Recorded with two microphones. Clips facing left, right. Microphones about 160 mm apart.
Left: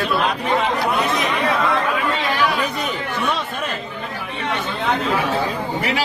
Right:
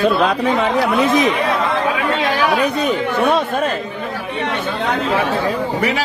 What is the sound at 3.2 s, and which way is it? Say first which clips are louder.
Speech: right 8 dB; 50° right (ahead or behind).